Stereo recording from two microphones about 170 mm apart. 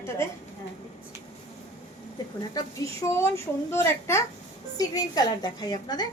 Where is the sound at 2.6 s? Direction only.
20° left (ahead or behind).